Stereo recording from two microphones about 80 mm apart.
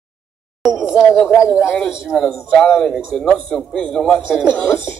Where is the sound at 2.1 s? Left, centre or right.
Centre.